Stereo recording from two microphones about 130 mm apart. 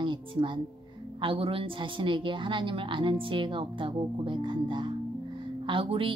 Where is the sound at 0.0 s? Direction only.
40° right (ahead or behind).